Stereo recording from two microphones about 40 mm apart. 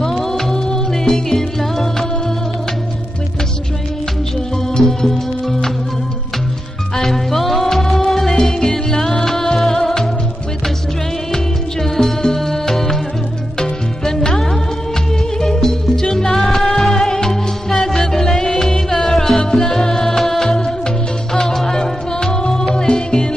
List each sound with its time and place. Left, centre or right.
0.0 s music: centre
4.7 s music: centre
7.0 s music: centre
11.3 s music: centre
19.4 s music: centre